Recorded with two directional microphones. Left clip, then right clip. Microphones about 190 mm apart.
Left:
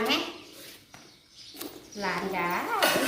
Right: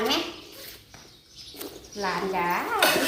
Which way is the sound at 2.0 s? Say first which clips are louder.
Right 3 dB; 5° left (ahead or behind).